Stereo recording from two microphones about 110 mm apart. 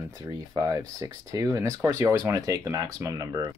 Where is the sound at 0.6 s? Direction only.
35° right (ahead or behind).